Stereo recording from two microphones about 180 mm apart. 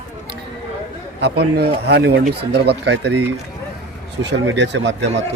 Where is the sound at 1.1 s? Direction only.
65° right (ahead or behind).